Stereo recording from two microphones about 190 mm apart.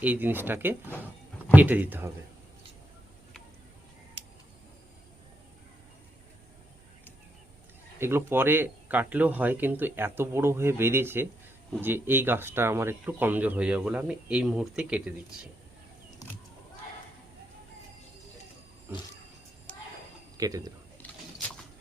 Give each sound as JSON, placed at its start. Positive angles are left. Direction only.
{"t": 0.0, "sound": "speech", "side_deg": -10}
{"t": 7.9, "sound": "speech", "side_deg": -10}
{"t": 19.7, "sound": "a sound", "side_deg": 5}
{"t": 20.3, "sound": "a man's voice", "side_deg": -20}